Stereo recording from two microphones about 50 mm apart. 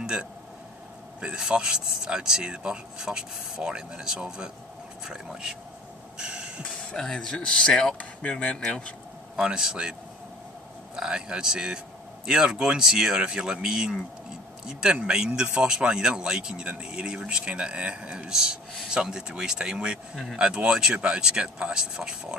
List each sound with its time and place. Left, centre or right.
0.0 s a sound: centre
1.2 s speech: centre
6.1 s a sound: centre
6.6 s speech: centre
8.0 s speech: left
9.4 s speech: centre
11.0 s speech: centre